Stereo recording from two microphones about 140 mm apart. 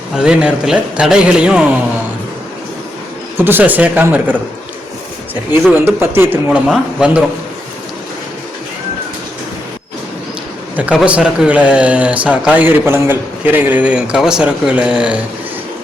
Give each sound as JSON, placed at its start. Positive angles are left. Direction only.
{"t": 0.2, "sound": "speech", "side_deg": -5}
{"t": 3.3, "sound": "speech", "side_deg": -15}
{"t": 5.7, "sound": "speech", "side_deg": -15}
{"t": 10.8, "sound": "speech", "side_deg": -10}